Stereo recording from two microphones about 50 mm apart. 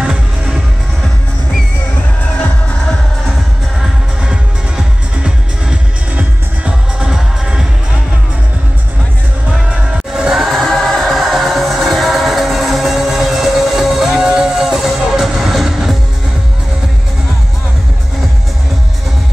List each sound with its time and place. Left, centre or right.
0.0 s music: centre
4.2 s music: centre
7.0 s music: centre
10.1 s music: centre
10.4 s music: centre